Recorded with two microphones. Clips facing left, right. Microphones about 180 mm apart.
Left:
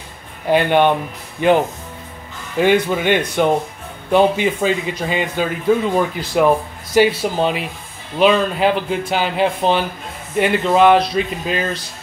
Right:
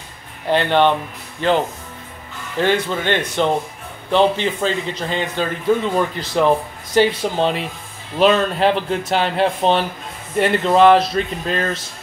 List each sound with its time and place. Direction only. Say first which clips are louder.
0.5 s a man's voice: left 2 dB; 10° left (ahead or behind)